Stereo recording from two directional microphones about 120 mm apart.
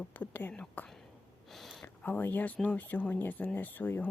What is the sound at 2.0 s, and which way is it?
Speech, 15° left (ahead or behind).